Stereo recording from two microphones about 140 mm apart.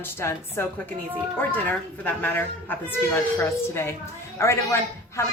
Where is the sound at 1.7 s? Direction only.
15° left (ahead or behind).